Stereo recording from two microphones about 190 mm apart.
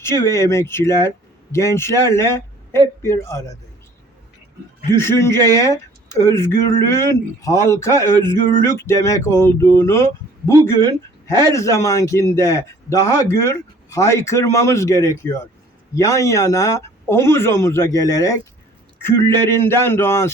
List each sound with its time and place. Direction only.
0.0 s a man's voice: 15° left (ahead or behind)
4.9 s a man's voice: 15° left (ahead or behind)